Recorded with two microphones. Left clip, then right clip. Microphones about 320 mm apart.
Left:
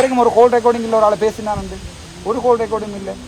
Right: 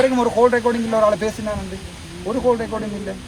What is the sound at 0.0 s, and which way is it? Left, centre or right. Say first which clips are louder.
Speech: left 4 dB; centre.